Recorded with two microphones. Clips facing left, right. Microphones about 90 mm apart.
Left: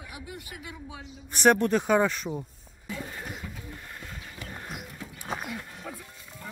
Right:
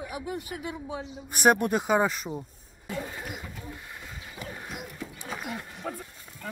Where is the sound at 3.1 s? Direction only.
10° right (ahead or behind).